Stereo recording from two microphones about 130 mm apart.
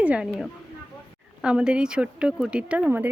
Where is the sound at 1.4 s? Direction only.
5° right (ahead or behind).